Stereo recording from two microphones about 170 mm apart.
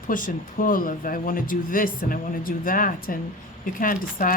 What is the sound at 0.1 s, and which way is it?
Speech, 50° left (ahead or behind).